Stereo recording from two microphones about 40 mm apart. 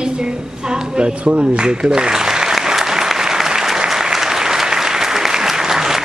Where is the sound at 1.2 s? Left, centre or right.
Right.